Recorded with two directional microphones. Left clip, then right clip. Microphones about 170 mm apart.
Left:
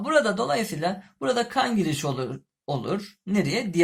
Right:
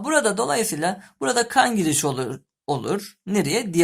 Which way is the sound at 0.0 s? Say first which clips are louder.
Right 1 dB; 40° right (ahead or behind).